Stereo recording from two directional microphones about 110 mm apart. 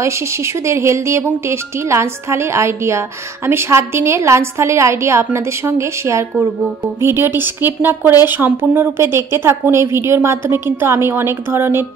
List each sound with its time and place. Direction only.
0.0 s a woman's voice: 25° right (ahead or behind)